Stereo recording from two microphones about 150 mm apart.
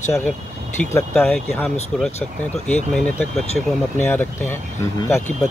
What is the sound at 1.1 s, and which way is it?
Speech, 5° left (ahead or behind).